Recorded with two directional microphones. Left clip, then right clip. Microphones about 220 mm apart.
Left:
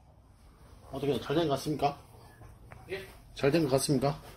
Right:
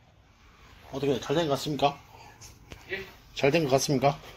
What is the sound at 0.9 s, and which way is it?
Speech, 20° right (ahead or behind).